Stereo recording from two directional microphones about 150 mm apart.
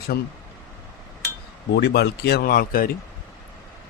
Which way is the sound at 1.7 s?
90° left.